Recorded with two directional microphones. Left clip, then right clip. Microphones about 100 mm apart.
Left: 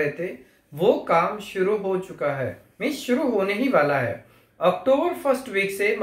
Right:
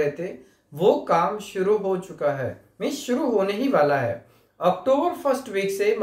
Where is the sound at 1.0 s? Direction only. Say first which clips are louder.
Even; 20° right (ahead or behind).